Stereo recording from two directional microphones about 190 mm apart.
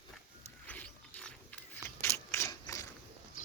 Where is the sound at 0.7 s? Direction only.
10° left (ahead or behind).